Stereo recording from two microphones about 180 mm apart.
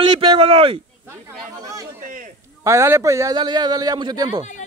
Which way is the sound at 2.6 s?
15° right (ahead or behind).